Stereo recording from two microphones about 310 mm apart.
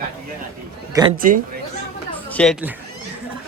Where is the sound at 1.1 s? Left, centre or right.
Right.